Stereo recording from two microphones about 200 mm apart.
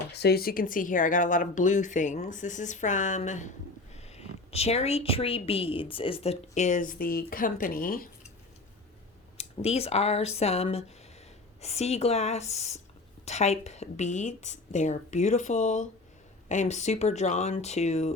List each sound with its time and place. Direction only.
0.1 s a woman's voice: 55° left (ahead or behind)
9.4 s a woman's voice: 30° left (ahead or behind)